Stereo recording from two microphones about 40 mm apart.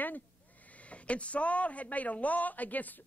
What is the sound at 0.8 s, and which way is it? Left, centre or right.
Speech, left.